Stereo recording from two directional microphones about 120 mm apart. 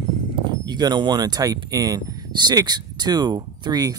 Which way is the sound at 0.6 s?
35° right (ahead or behind).